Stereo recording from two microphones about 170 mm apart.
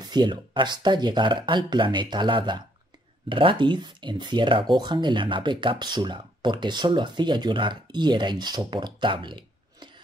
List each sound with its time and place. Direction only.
0.0 s speech: 25° right (ahead or behind)